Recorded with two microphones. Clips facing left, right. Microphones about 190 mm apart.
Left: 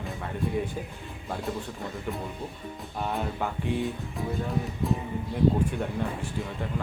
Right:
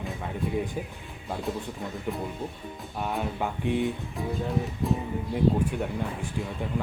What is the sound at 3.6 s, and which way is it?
Speech, 20° right (ahead or behind).